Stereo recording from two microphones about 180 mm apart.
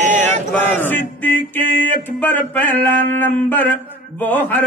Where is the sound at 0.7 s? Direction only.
10° left (ahead or behind).